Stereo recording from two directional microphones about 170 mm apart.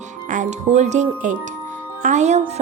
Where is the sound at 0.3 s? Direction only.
45° right (ahead or behind).